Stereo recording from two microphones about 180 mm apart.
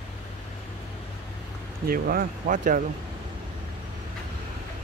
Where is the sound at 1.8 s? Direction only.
55° right (ahead or behind).